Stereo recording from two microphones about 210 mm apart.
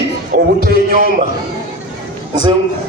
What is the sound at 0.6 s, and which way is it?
Speech, 45° right (ahead or behind).